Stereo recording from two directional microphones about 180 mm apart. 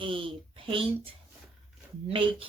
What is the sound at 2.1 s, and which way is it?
Speech, 30° right (ahead or behind).